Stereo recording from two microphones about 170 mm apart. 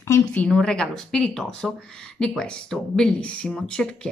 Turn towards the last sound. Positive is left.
turn(degrees=5)  # may be behind; listen again after turning